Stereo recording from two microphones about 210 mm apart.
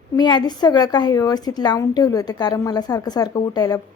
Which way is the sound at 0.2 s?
20° left (ahead or behind).